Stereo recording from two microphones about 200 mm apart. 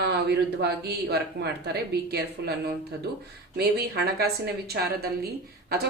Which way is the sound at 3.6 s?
55° right (ahead or behind).